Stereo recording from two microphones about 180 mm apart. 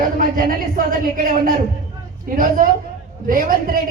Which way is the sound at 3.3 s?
50° right (ahead or behind).